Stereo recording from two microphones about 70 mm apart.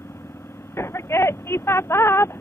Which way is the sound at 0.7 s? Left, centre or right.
Left.